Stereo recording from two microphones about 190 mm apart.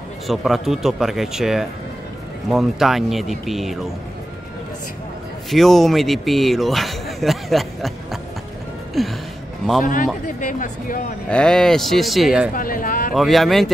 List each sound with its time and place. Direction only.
0.3 s speech: centre (ahead or behind)
5.5 s a man's voice: centre (ahead or behind)
10.2 s speech: 45° left (ahead or behind)
11.2 s speech: 5° left (ahead or behind)
12.5 s speech: 45° left (ahead or behind)
13.1 s speech: centre (ahead or behind)